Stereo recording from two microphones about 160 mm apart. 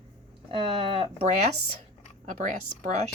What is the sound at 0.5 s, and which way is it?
Speech, 35° right (ahead or behind).